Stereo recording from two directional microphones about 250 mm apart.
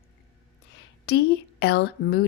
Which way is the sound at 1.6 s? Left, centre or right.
Left.